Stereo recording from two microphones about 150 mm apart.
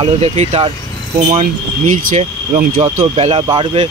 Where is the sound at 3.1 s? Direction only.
40° right (ahead or behind).